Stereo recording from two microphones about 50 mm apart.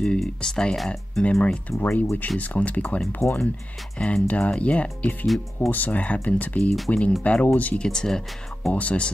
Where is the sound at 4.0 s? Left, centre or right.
Left.